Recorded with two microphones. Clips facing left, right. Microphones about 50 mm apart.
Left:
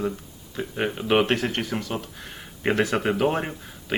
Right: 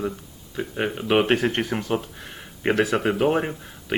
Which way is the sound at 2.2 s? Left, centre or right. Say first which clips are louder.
Right 1 dB; centre.